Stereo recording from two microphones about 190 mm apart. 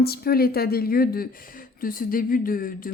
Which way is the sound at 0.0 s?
55° left (ahead or behind).